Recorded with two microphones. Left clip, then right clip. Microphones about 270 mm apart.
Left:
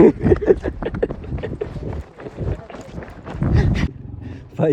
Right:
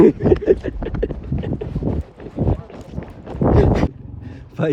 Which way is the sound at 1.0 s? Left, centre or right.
Centre.